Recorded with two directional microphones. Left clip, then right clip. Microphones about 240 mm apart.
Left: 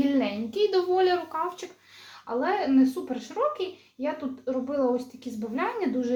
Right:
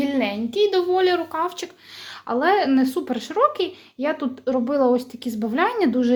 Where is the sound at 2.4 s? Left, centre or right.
Right.